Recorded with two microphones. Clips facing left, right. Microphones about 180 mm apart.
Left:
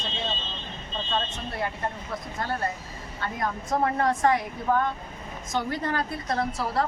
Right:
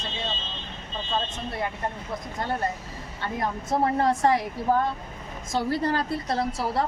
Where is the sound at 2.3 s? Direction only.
20° right (ahead or behind).